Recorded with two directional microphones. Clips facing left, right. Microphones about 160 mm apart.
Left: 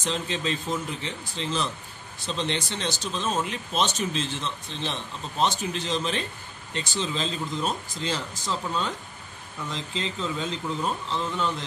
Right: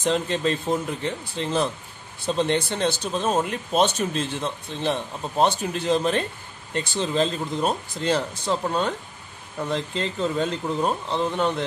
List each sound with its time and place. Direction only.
0.0 s speech: 55° right (ahead or behind)